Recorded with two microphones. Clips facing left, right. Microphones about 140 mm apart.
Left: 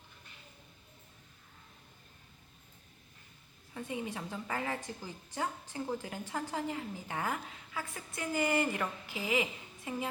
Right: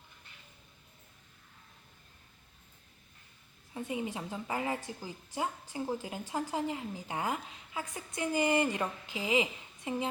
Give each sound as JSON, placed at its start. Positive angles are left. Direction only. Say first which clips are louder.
{"t": 3.8, "sound": "a woman's voice", "louder": "right 2 dB", "side_deg": -20}